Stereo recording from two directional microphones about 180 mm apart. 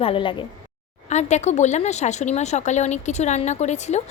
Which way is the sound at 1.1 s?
40° left (ahead or behind).